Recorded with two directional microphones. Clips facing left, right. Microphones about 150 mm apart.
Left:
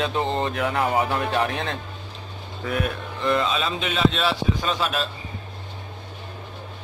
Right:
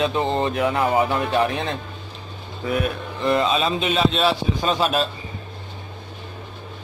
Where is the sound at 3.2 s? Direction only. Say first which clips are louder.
Right 3 dB; 25° right (ahead or behind).